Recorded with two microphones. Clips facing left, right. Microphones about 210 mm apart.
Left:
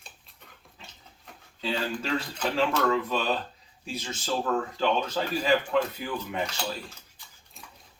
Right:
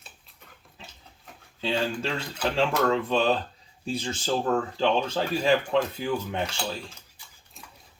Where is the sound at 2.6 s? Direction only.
30° right (ahead or behind).